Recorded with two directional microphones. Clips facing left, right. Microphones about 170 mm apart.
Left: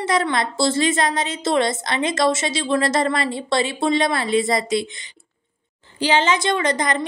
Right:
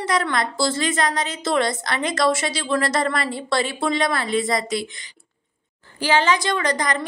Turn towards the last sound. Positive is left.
turn(degrees=25)  # may be behind; listen again after turning